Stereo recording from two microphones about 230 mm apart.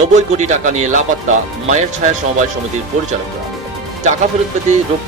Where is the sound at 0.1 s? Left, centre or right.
Right.